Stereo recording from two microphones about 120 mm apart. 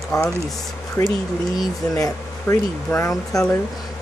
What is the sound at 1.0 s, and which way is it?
Speech, 25° left (ahead or behind).